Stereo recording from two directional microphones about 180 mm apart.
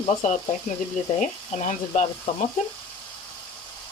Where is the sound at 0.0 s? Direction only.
40° left (ahead or behind).